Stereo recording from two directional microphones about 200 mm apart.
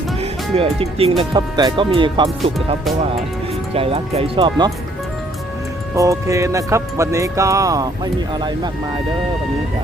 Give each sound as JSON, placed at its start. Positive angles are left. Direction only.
{"t": 0.2, "sound": "speech", "side_deg": -30}
{"t": 3.8, "sound": "speech", "side_deg": -30}
{"t": 6.0, "sound": "speech", "side_deg": -15}